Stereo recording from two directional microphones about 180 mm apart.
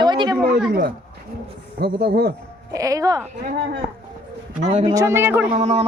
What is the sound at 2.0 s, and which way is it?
Speech, 65° right (ahead or behind).